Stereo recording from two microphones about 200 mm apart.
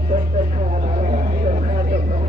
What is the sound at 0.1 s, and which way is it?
Vehicle, 35° right (ahead or behind).